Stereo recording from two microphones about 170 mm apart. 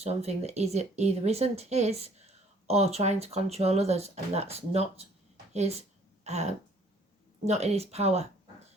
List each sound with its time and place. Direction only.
0.0 s speech: 40° right (ahead or behind)
6.2 s a sound: 40° right (ahead or behind)
7.4 s speech: 40° right (ahead or behind)